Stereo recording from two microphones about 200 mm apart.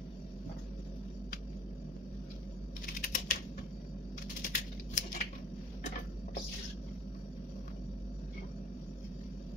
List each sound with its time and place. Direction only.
2.9 s typing: 40° left (ahead or behind)
4.4 s typing: 40° left (ahead or behind)